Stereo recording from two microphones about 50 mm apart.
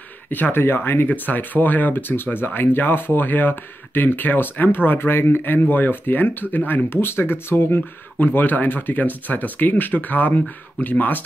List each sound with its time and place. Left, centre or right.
0.3 s speech: left
1.1 s speech: left
6.9 s speech: left